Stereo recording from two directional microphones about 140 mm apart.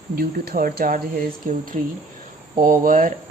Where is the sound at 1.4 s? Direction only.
75° right (ahead or behind).